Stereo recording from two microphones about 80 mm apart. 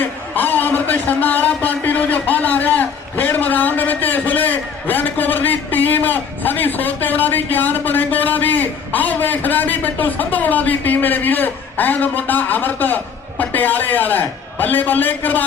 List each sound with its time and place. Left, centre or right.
0.0 s a man's voice: left